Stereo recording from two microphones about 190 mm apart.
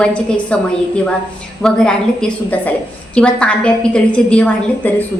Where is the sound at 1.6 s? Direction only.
5° left (ahead or behind).